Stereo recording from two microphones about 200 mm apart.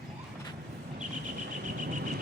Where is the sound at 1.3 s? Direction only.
40° right (ahead or behind).